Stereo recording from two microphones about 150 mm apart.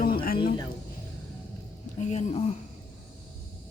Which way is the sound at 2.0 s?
50° left (ahead or behind).